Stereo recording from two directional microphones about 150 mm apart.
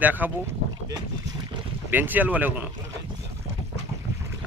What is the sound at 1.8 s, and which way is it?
Speech, 10° right (ahead or behind).